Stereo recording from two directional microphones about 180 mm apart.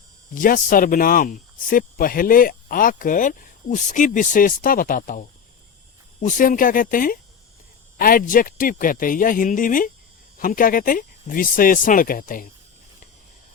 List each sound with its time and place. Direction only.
0.3 s speech: 50° left (ahead or behind)
6.2 s speech: 45° left (ahead or behind)